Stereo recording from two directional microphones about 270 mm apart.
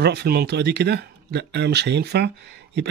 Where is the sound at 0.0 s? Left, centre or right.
Right.